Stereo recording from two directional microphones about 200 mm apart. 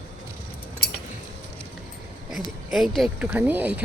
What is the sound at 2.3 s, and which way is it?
Speech, centre (ahead or behind).